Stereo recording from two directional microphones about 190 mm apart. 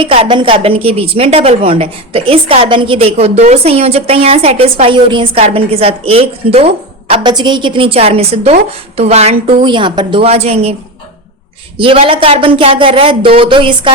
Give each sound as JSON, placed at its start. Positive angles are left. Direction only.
{"t": 0.0, "sound": "a woman's voice", "side_deg": -30}
{"t": 11.8, "sound": "speech", "side_deg": -30}